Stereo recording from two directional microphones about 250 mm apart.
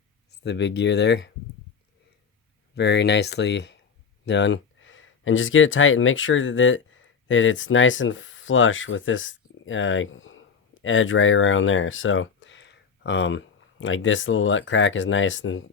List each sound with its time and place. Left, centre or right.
0.4 s speech: left
2.7 s speech: left